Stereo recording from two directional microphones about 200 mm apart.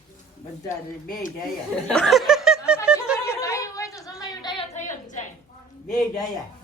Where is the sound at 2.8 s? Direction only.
5° right (ahead or behind).